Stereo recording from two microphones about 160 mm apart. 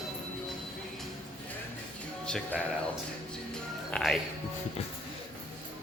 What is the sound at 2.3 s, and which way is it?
Speech, 5° left (ahead or behind).